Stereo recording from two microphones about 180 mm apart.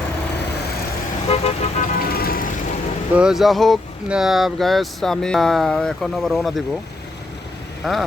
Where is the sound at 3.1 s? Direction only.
5° right (ahead or behind).